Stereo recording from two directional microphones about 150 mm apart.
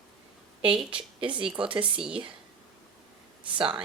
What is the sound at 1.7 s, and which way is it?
Speech, 35° right (ahead or behind).